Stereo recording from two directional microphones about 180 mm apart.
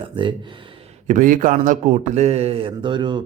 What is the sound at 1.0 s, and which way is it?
Mantra, 45° right (ahead or behind).